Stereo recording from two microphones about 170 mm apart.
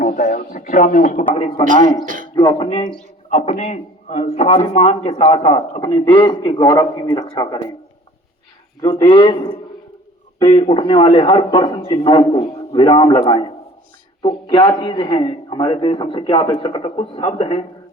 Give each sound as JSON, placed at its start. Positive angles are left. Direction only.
{"t": 0.3, "sound": "a man's voice", "side_deg": 65}
{"t": 2.0, "sound": "speech", "side_deg": -50}
{"t": 2.3, "sound": "a man's voice", "side_deg": 25}
{"t": 3.2, "sound": "a man's voice", "side_deg": 40}
{"t": 8.8, "sound": "a man's voice", "side_deg": 25}